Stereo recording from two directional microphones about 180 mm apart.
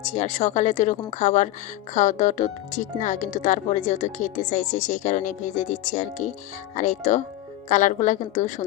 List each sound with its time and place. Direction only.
0.0 s speech: 40° left (ahead or behind)